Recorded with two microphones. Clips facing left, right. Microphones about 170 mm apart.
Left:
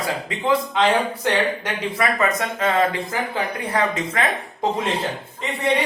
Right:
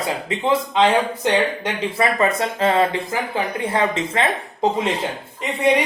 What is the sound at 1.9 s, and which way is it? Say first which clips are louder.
Speech: right 2 dB; 30° right (ahead or behind).